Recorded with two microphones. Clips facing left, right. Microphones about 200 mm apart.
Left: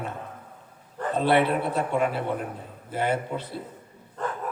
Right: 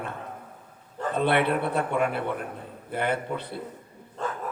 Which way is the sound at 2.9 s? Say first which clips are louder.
Left 1 dB; 60° right (ahead or behind).